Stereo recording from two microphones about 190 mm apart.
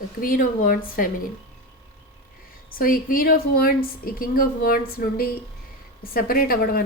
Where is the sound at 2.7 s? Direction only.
50° left (ahead or behind).